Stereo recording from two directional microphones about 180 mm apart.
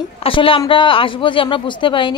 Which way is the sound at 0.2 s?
30° left (ahead or behind).